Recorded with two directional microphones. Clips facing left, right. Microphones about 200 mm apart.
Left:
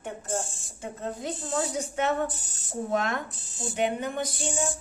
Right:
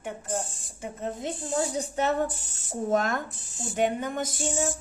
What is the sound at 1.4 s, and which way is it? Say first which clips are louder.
Speech: right 2 dB; 25° right (ahead or behind).